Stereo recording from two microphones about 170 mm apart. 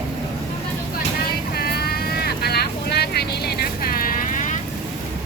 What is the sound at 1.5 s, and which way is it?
Vehicle, 65° left (ahead or behind).